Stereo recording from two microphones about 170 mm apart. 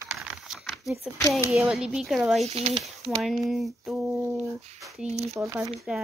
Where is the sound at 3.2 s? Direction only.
Centre (ahead or behind).